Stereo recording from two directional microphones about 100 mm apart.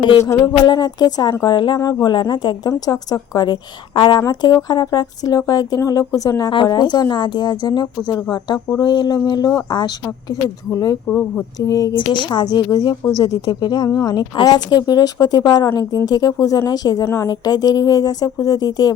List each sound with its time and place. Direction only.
0.4 s a woman's voice: 45° left (ahead or behind)
6.5 s a woman's voice: 45° left (ahead or behind)
10.7 s speech: 35° left (ahead or behind)
11.9 s a woman's voice: 50° left (ahead or behind)